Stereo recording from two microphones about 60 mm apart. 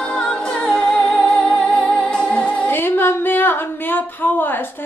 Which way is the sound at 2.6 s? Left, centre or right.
Left.